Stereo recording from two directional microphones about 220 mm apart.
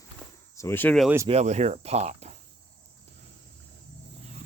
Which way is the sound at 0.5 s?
10° left (ahead or behind).